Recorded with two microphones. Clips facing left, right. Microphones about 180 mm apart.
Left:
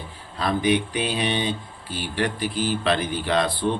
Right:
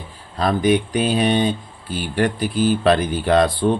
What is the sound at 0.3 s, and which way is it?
Mantra, 45° right (ahead or behind).